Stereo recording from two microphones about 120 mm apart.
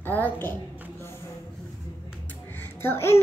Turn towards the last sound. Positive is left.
turn(degrees=20)  # may be behind; listen again after turning